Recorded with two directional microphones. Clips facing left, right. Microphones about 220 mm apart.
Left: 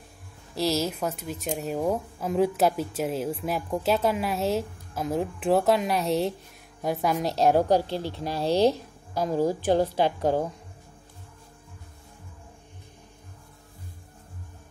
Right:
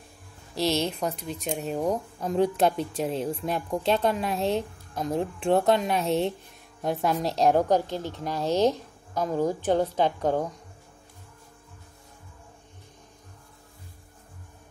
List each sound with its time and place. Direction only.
0.6 s a woman's voice: centre (ahead or behind)
7.7 s speech: 30° left (ahead or behind)
8.0 s a woman's voice: 10° left (ahead or behind)